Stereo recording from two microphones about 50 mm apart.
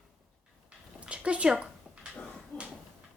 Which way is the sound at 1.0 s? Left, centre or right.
Right.